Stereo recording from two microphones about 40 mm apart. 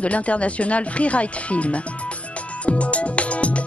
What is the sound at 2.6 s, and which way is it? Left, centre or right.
Music, left.